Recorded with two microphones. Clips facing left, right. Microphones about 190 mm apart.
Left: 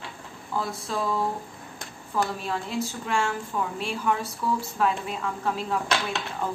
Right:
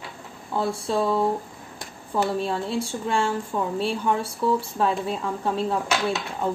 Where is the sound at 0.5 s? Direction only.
30° right (ahead or behind).